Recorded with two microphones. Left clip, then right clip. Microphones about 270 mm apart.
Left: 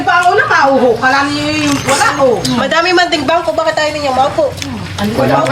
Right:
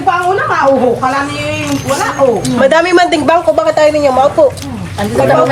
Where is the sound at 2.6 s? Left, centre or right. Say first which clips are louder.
Right 5 dB; right.